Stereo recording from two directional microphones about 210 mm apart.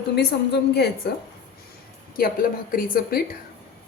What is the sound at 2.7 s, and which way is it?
Speech, 45° left (ahead or behind).